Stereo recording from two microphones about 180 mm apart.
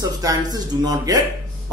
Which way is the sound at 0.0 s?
20° right (ahead or behind).